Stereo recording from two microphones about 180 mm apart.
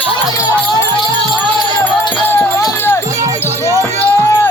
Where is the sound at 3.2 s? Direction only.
15° right (ahead or behind).